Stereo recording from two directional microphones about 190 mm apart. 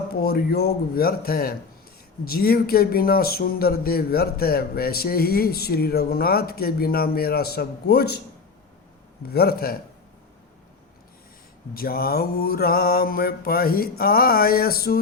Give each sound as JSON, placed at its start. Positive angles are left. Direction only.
{"t": 0.1, "sound": "speech", "side_deg": 55}
{"t": 9.3, "sound": "a man's voice", "side_deg": 55}
{"t": 11.7, "sound": "speech", "side_deg": 50}